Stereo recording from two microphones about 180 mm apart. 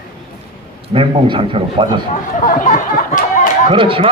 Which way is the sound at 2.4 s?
45° left (ahead or behind).